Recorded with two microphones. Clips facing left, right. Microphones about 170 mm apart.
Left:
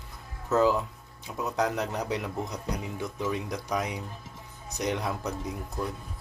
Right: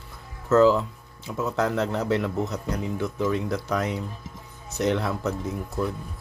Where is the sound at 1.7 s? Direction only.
90° right.